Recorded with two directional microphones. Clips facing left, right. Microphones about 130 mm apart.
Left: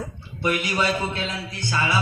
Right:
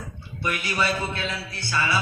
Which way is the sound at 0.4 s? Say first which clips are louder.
Left 3 dB; 25° left (ahead or behind).